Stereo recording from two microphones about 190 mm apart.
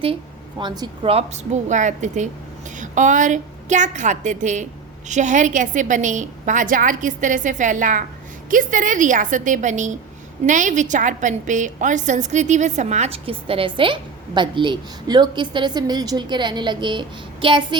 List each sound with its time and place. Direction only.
0.6 s a woman's voice: 25° right (ahead or behind)